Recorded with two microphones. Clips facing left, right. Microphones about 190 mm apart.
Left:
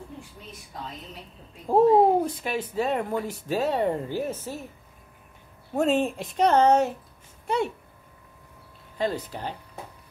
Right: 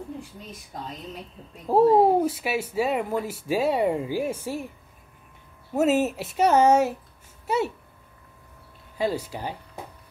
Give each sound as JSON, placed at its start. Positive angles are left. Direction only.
{"t": 1.7, "sound": "speech", "side_deg": -5}
{"t": 5.8, "sound": "speech", "side_deg": -5}
{"t": 8.9, "sound": "speech", "side_deg": -10}